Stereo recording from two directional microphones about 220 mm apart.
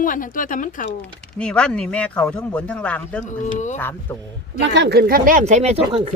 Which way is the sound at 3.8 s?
10° left (ahead or behind).